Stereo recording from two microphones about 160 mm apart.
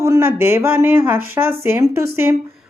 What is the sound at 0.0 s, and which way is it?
Speech, 15° right (ahead or behind).